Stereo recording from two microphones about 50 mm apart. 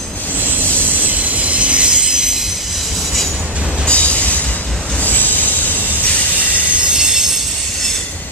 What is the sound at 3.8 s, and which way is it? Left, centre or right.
Train, left.